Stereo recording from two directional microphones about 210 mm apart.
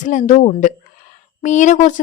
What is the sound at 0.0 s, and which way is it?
Speech, 35° left (ahead or behind).